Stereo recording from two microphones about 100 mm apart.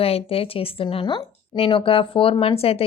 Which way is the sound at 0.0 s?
75° left (ahead or behind).